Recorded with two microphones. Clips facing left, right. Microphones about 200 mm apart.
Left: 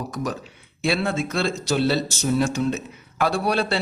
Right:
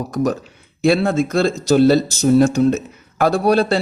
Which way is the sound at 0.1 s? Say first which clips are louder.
Right 9 dB; 45° right (ahead or behind).